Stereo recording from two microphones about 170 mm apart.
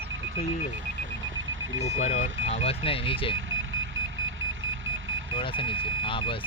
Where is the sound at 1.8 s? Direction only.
40° left (ahead or behind).